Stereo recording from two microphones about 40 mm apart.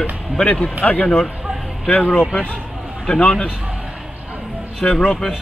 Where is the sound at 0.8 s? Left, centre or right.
Left.